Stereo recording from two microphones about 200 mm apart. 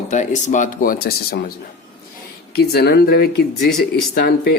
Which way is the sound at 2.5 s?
50° left (ahead or behind).